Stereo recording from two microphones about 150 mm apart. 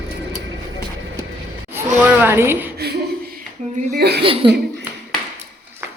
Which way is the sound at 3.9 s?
90° right.